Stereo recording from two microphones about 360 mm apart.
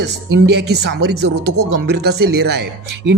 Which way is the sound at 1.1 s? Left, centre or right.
Right.